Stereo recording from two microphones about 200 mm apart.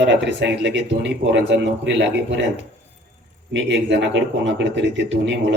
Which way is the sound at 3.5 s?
65° right (ahead or behind).